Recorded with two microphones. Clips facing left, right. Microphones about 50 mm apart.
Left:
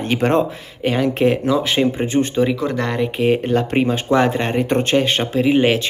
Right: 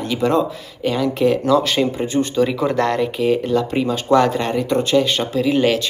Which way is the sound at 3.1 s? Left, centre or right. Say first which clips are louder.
Left 1 dB; left.